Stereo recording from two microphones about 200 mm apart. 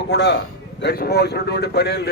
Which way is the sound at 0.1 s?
60° left (ahead or behind).